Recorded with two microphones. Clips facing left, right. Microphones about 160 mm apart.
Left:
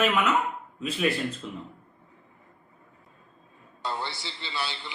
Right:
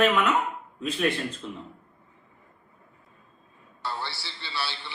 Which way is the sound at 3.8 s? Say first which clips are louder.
Left 1 dB; 20° left (ahead or behind).